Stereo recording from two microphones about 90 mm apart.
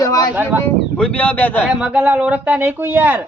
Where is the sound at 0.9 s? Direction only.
15° left (ahead or behind).